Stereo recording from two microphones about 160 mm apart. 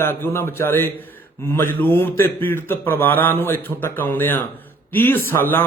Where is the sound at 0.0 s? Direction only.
15° left (ahead or behind).